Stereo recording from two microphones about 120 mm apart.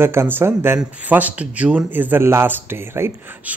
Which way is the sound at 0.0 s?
20° right (ahead or behind).